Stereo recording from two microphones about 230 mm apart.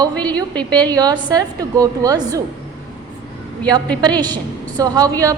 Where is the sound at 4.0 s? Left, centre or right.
Centre.